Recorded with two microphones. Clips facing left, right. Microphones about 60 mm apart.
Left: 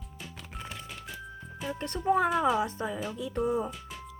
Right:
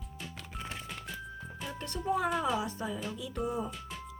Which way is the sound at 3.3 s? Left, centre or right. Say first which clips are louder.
Left 6 dB; centre.